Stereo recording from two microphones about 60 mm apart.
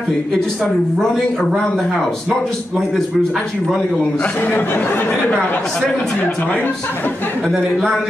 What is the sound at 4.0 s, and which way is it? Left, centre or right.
Speech, left.